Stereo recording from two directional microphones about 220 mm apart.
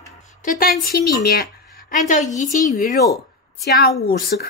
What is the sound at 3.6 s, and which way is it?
Speech, 45° left (ahead or behind).